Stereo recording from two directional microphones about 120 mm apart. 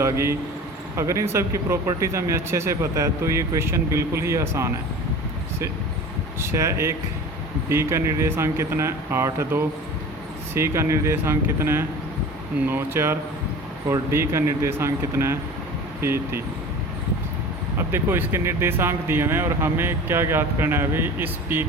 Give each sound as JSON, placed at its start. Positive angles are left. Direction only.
{"t": 0.0, "sound": "speech", "side_deg": -25}
{"t": 6.4, "sound": "speech", "side_deg": -25}
{"t": 17.7, "sound": "speech", "side_deg": -20}